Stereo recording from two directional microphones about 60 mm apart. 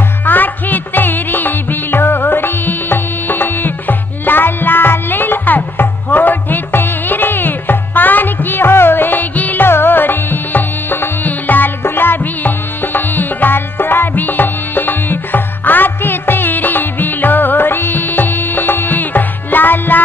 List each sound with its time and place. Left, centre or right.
0.2 s music: left